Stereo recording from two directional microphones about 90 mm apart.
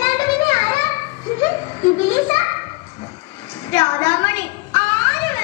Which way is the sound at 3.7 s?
35° left (ahead or behind).